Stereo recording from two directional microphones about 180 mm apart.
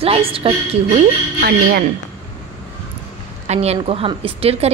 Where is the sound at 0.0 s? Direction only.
30° right (ahead or behind).